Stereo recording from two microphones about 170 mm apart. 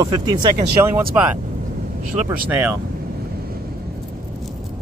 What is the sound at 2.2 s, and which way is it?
Speech, 5° right (ahead or behind).